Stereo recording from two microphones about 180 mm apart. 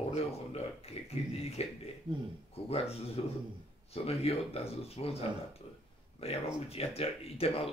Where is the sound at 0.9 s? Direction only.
35° left (ahead or behind).